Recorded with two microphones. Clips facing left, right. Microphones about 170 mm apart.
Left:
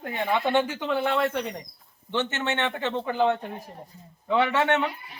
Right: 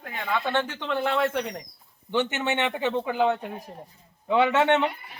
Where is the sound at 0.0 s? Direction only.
25° left (ahead or behind); by 1.6 s 5° left (ahead or behind).